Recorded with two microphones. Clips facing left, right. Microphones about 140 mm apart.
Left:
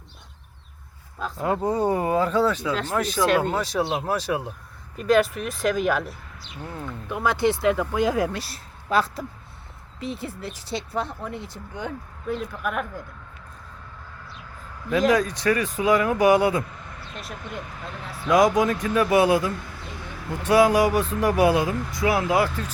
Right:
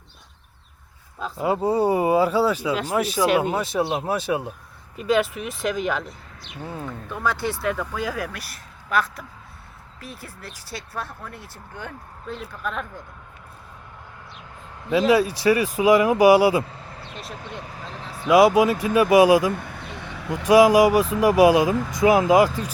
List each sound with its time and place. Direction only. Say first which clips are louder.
1.2 s speech: right 2 dB; 5° right (ahead or behind)
6.6 s speech: right 2 dB; 10° right (ahead or behind)
7.1 s speech: left 4 dB; 15° left (ahead or behind)
14.9 s speech: right 2 dB; 5° right (ahead or behind)
16.7 s vehicle: right 1 dB; 30° right (ahead or behind)
17.2 s speech: left 1 dB; centre (ahead or behind)
18.3 s speech: right 3 dB; 10° right (ahead or behind)
19.5 s vehicle: right 3 dB; 60° right (ahead or behind)
20.5 s speech: right 4 dB; 10° right (ahead or behind)